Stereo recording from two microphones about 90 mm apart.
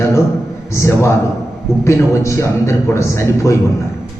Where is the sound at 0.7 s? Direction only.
30° left (ahead or behind).